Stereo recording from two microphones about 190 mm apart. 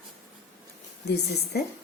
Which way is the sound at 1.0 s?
60° left (ahead or behind).